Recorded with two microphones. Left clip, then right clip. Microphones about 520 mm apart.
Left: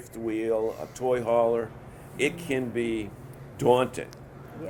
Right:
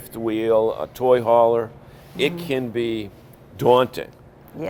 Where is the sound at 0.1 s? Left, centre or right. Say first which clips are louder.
Right 8 dB; right.